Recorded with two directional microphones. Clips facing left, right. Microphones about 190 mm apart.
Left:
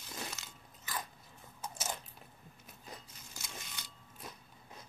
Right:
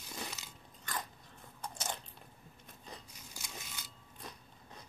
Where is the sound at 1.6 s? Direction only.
5° left (ahead or behind).